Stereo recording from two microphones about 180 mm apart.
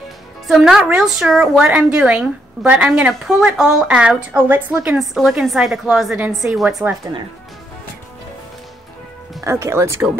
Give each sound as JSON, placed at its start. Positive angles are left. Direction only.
{"t": 0.5, "sound": "a woman's voice", "side_deg": 0}
{"t": 9.4, "sound": "speech", "side_deg": -15}